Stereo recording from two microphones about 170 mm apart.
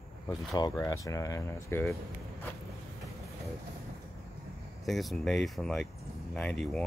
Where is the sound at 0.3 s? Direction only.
25° left (ahead or behind).